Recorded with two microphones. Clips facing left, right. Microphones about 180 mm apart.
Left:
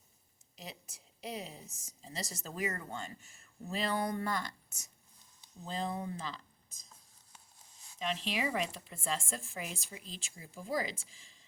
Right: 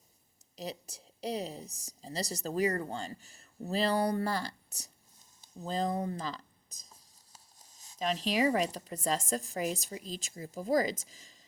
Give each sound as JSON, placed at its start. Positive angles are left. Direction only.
{"t": 0.5, "sound": "a woman's voice", "side_deg": -35}
{"t": 7.9, "sound": "a woman's voice", "side_deg": -40}